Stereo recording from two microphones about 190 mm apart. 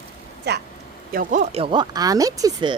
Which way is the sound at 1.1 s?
45° right (ahead or behind).